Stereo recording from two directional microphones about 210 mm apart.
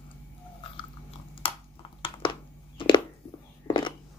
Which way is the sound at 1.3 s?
25° left (ahead or behind).